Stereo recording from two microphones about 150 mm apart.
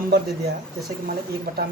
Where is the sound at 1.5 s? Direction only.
90° right.